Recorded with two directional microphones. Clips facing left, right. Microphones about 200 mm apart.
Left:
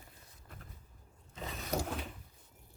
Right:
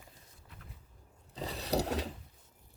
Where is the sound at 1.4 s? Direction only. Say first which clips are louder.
Right 4 dB; 35° right (ahead or behind).